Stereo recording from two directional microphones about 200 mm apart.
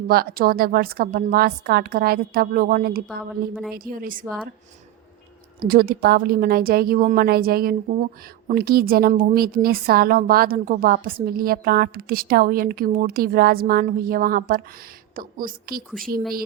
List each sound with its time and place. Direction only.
0.1 s a woman's voice: 50° right (ahead or behind)
5.5 s a woman's voice: 50° right (ahead or behind)